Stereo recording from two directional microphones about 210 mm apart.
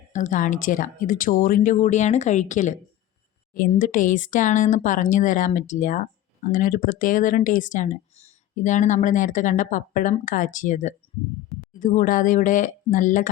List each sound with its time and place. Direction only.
0.1 s speech: 35° left (ahead or behind)